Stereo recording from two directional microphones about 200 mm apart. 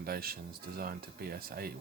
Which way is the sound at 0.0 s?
50° right (ahead or behind).